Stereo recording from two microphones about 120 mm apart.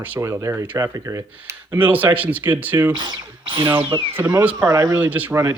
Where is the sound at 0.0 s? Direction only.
20° right (ahead or behind).